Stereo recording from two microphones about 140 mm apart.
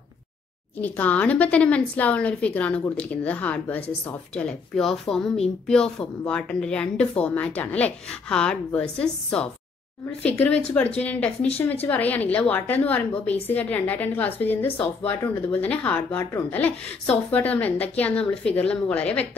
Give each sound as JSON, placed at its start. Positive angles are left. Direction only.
{"t": 0.7, "sound": "a woman's voice", "side_deg": 10}
{"t": 11.4, "sound": "speech", "side_deg": 45}
{"t": 11.8, "sound": "a woman's voice", "side_deg": 10}